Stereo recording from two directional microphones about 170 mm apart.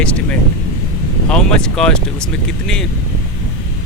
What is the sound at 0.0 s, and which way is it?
Vehicle, 5° left (ahead or behind).